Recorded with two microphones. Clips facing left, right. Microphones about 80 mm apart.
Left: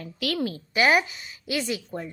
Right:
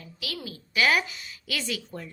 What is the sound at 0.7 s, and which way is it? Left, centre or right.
A woman's voice, left.